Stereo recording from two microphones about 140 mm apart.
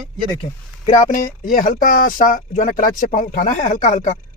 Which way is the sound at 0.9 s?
80° left.